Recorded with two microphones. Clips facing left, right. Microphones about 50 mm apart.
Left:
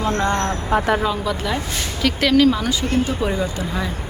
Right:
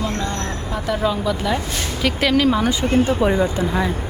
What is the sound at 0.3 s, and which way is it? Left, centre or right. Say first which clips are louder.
Speech: left 6 dB; left.